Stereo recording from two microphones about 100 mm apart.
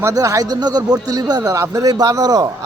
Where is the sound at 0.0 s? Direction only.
35° right (ahead or behind).